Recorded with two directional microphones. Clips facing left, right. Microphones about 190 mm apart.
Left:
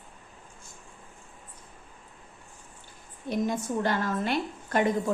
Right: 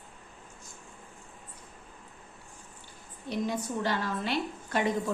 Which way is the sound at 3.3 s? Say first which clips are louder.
Left 3 dB; 50° left (ahead or behind).